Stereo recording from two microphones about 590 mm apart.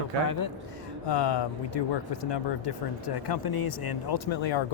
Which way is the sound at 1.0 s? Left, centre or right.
Left.